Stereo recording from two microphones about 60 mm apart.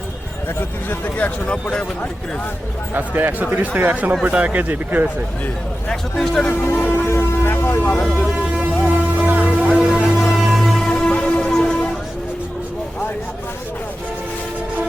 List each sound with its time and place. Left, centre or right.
0.9 s speech: left
2.9 s speech: right
5.9 s speech: centre
6.8 s a sound: left
8.9 s music: right
9.7 s music: centre